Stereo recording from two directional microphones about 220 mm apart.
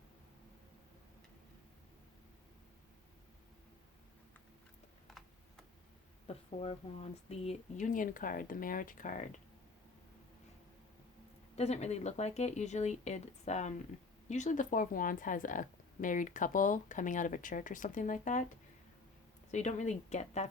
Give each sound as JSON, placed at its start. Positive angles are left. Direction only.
{"t": 6.2, "sound": "speech", "side_deg": 25}
{"t": 11.5, "sound": "speech", "side_deg": 30}
{"t": 19.5, "sound": "speech", "side_deg": 30}